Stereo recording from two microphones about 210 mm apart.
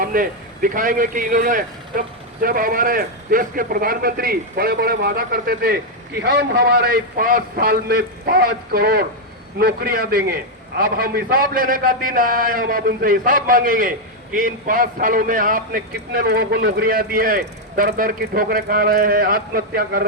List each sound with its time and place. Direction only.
0.0 s a man's voice: 40° right (ahead or behind)